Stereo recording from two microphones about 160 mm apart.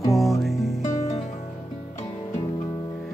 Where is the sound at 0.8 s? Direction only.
50° left (ahead or behind).